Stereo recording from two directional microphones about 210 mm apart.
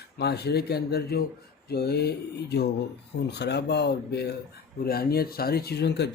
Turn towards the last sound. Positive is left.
turn(degrees=50)  # may be behind; listen again after turning